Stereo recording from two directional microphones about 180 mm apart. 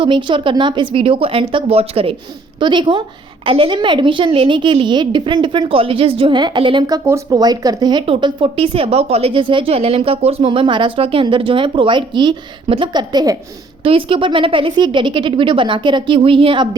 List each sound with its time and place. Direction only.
0.0 s a woman's voice: 25° right (ahead or behind)